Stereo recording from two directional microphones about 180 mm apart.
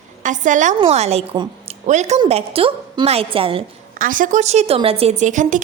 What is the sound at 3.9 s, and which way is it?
A woman's voice, 50° right (ahead or behind).